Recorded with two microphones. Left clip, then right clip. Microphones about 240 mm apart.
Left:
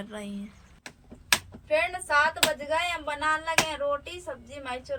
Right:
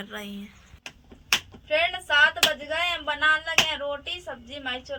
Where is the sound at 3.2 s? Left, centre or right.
Left.